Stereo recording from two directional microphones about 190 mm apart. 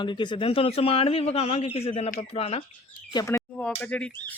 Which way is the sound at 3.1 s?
15° left (ahead or behind).